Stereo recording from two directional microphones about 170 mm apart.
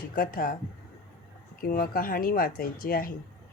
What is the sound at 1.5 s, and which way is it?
A woman's voice, 60° left (ahead or behind).